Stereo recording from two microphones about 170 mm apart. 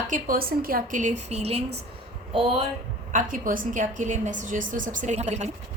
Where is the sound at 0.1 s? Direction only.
55° right (ahead or behind).